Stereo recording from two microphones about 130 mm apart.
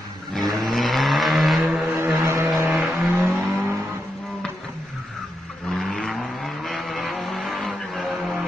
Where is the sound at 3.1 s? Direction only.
15° right (ahead or behind).